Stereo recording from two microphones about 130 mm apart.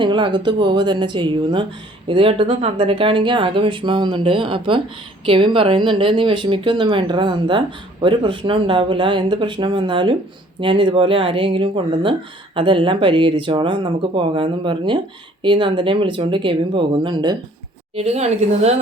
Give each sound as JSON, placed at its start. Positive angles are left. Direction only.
{"t": 0.0, "sound": "speech", "side_deg": -35}
{"t": 17.9, "sound": "speech", "side_deg": -50}